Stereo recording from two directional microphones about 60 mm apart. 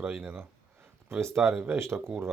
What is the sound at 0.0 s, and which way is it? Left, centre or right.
Speech, right.